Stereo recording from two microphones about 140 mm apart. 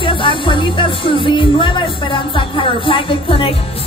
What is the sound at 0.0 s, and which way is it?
A woman's voice, 40° left (ahead or behind).